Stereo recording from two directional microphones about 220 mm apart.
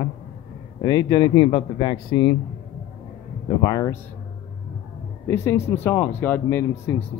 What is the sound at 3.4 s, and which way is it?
Speech, 15° left (ahead or behind).